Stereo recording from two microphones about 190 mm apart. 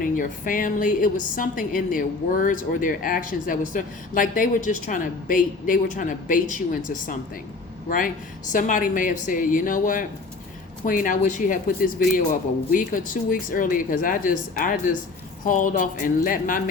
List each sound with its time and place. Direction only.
0.0 s a woman's voice: 45° left (ahead or behind)